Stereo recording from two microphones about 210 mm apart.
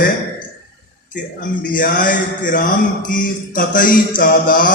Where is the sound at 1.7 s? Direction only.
40° left (ahead or behind).